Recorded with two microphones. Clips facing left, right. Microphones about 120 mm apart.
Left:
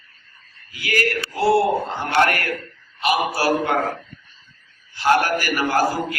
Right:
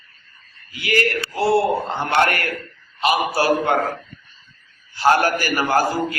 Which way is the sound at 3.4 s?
25° right (ahead or behind).